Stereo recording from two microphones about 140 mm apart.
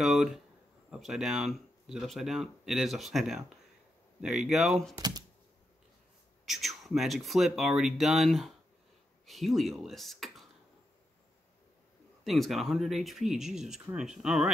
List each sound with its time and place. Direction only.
0.0 s speech: centre (ahead or behind)
4.9 s computer keyboard: 30° right (ahead or behind)
6.4 s speech: centre (ahead or behind)
12.3 s speech: centre (ahead or behind)